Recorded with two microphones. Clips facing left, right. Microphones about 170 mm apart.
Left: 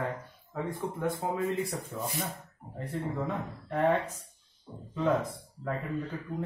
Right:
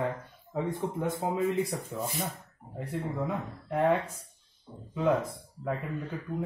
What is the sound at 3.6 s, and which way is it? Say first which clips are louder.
Speech: right 1 dB; 10° right (ahead or behind).